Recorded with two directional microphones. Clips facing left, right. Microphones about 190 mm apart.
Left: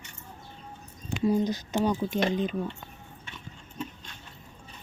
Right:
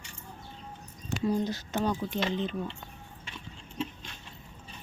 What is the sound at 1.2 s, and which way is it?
Speech, 15° left (ahead or behind).